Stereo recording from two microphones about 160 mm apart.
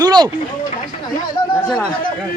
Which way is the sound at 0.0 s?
25° right (ahead or behind).